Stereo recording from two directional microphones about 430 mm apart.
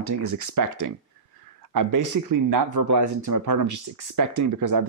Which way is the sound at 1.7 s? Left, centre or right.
Right.